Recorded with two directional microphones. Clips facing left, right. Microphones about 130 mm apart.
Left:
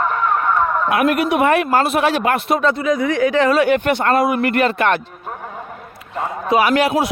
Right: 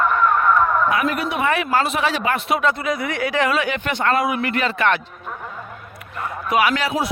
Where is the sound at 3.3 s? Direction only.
35° left (ahead or behind); by 4.9 s 50° left (ahead or behind).